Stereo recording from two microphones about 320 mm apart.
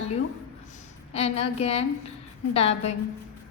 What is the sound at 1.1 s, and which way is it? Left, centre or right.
A woman's voice, centre.